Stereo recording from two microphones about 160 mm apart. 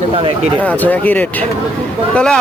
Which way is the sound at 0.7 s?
10° left (ahead or behind).